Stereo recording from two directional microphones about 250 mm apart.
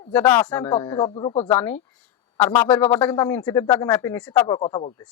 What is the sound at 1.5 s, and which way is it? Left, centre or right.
A man's voice, centre.